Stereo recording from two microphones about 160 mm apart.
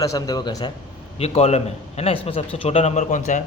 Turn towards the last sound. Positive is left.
turn(degrees=50)  # may be behind; listen again after turning